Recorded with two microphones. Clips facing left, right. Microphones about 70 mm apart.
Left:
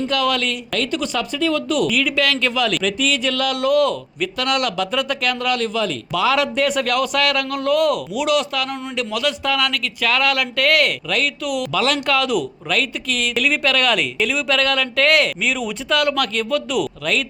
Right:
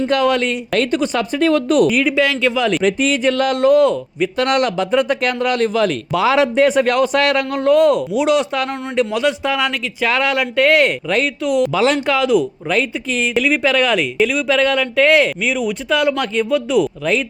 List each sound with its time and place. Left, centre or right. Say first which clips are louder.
0.1 s speech: right 6 dB; right
2.1 s speech: right 3 dB; centre
2.6 s speech: right 4 dB; right